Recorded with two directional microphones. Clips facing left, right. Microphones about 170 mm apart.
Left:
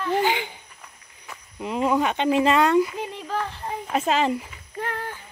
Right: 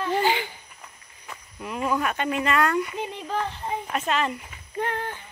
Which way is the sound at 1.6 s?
25° left (ahead or behind).